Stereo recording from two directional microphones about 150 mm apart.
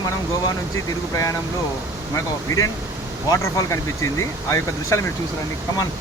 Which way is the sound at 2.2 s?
25° left (ahead or behind).